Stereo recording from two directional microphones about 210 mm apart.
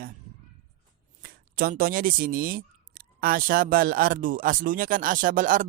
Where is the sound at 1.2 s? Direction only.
45° right (ahead or behind).